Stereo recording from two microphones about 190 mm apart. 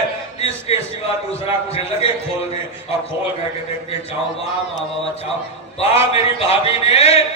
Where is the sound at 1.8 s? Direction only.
30° left (ahead or behind).